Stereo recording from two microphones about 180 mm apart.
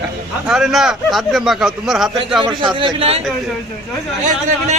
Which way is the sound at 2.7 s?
30° right (ahead or behind).